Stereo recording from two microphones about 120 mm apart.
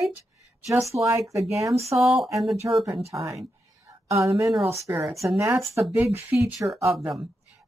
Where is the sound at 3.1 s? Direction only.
25° right (ahead or behind).